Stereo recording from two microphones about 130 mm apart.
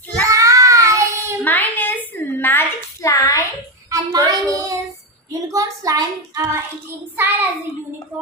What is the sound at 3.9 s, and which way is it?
Child singing, 30° right (ahead or behind).